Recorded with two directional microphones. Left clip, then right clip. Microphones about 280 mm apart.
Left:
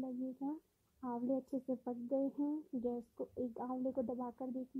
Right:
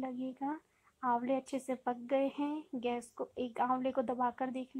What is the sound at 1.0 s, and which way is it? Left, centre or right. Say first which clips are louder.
Speech: right 7 dB; centre.